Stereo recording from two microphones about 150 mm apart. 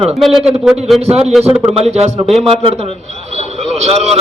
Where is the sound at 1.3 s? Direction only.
10° right (ahead or behind).